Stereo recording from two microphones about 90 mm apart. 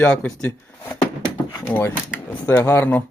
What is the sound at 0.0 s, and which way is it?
Speech, 15° left (ahead or behind).